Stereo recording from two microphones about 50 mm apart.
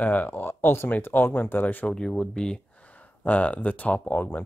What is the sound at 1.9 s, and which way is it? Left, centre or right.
Speech, centre.